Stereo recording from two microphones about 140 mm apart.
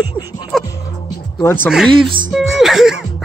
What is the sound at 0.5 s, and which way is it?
Music, centre (ahead or behind).